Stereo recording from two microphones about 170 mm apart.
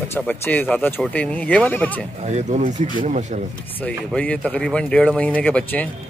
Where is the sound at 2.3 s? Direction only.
40° right (ahead or behind).